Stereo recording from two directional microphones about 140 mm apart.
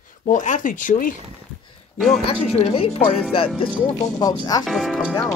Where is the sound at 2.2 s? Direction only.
45° left (ahead or behind).